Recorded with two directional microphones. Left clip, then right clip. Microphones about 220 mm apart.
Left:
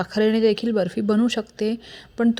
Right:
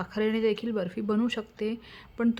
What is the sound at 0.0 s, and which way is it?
A woman's voice, 20° left (ahead or behind).